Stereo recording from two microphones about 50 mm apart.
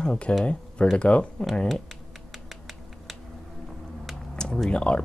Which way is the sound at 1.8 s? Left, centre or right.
Centre.